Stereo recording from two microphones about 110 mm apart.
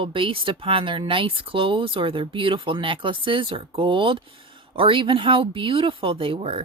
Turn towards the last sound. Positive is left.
turn(degrees=-60)  # may be behind; listen again after turning